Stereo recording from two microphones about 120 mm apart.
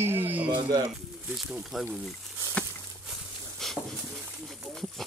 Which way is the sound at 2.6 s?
10° left (ahead or behind).